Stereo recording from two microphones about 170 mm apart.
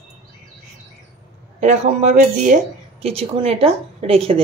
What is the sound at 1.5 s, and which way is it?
Speech, 45° right (ahead or behind).